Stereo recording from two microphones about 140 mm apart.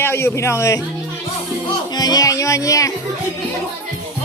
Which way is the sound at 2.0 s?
25° left (ahead or behind).